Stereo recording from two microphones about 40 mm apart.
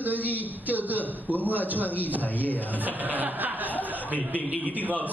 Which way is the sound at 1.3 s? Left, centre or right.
Left.